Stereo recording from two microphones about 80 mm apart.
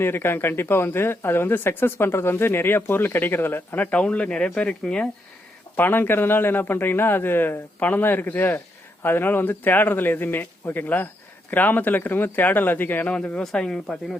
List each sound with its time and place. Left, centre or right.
0.0 s speech: left
3.9 s speech: centre
5.7 s speech: left; by 14.2 s centre